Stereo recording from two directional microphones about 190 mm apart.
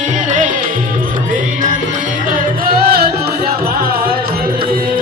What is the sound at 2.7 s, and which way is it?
Music, 55° right (ahead or behind).